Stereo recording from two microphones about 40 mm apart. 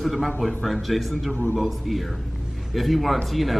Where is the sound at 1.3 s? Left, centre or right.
Left.